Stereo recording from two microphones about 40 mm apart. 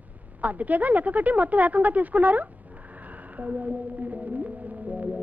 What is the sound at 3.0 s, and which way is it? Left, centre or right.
Whale vocalization, right.